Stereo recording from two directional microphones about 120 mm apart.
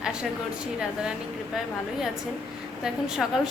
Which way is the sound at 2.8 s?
5° right (ahead or behind).